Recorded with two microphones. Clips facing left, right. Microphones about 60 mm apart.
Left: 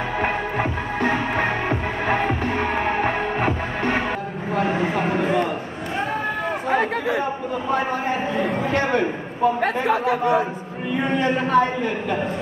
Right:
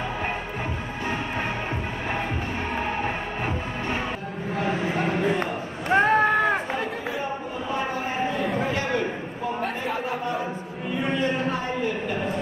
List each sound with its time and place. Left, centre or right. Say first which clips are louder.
0.2 s music: left 7 dB; left
6.7 s chatter: left 8 dB; left
8.4 s chatter: left 4 dB; left
9.6 s speech: left 7 dB; left
11.0 s speech: left 4 dB; left